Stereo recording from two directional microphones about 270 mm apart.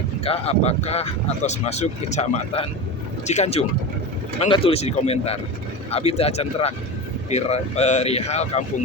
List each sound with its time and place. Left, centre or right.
0.3 s speech: left